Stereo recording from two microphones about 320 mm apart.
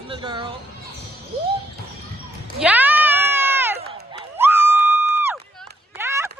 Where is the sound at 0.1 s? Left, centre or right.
Centre.